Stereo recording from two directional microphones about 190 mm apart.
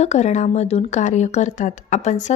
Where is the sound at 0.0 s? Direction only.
35° left (ahead or behind).